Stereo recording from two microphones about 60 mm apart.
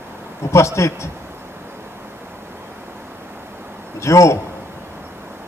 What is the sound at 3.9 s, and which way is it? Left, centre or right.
Speech, left.